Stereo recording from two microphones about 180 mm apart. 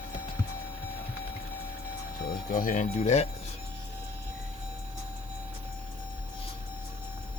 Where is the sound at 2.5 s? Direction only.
45° left (ahead or behind).